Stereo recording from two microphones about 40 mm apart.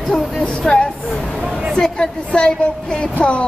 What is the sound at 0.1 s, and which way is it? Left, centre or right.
Speech, left.